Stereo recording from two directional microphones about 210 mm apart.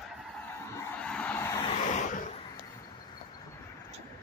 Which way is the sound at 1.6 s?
35° left (ahead or behind).